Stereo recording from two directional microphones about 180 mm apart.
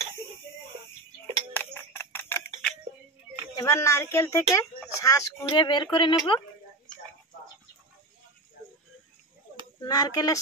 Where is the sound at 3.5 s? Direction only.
20° left (ahead or behind).